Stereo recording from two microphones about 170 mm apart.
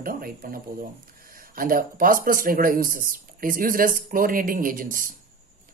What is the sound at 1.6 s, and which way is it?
Speech, 55° right (ahead or behind).